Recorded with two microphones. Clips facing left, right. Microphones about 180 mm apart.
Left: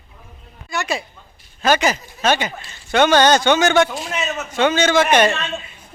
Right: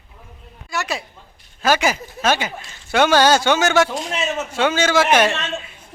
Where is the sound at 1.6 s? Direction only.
5° right (ahead or behind).